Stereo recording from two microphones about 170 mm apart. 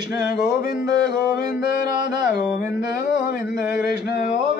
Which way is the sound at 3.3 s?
70° left (ahead or behind).